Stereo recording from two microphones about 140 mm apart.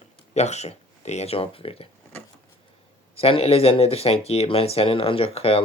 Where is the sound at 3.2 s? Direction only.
45° left (ahead or behind).